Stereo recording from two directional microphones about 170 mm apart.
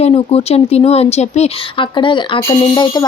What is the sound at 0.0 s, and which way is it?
Speech, 35° left (ahead or behind).